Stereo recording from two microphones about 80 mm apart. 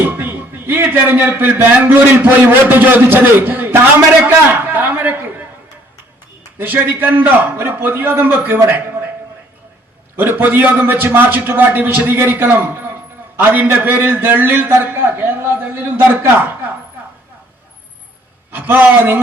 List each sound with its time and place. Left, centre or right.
0.1 s a man's voice: right
4.5 s a sound: right
6.6 s a man's voice: right
10.2 s a man's voice: right
18.5 s a man's voice: right